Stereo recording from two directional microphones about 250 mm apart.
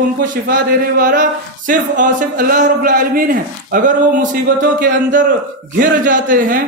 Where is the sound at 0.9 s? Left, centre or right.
Right.